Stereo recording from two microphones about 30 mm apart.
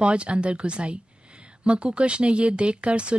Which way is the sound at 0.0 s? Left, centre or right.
Right.